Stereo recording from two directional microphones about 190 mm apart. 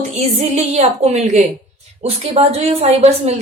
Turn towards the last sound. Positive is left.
turn(degrees=-35)  # may be behind; listen again after turning